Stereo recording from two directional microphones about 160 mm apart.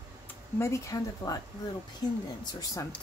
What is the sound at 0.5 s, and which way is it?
Speech, 20° left (ahead or behind).